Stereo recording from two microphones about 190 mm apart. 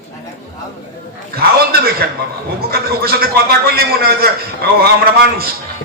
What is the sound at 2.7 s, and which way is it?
A man's voice, 50° right (ahead or behind).